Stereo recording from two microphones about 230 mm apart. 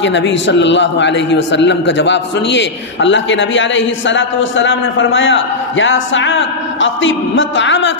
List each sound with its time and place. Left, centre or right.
0.0 s a man's voice: left